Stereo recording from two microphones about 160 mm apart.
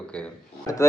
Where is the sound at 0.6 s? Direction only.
20° left (ahead or behind).